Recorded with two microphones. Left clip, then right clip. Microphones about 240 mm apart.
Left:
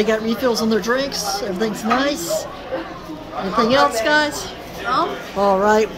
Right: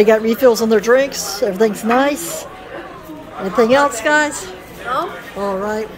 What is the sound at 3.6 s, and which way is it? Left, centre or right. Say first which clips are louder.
Speech: right 3 dB; centre.